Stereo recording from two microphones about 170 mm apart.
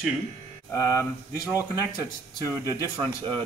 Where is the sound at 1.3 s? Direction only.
10° right (ahead or behind).